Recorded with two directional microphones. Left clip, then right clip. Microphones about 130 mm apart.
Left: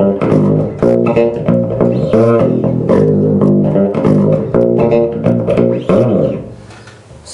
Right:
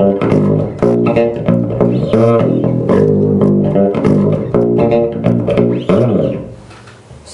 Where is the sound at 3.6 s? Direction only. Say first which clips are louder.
Even; 15° right (ahead or behind).